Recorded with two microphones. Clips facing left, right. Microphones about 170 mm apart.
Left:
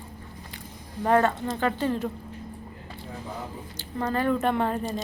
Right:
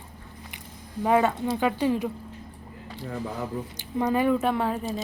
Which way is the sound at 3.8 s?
15° right (ahead or behind).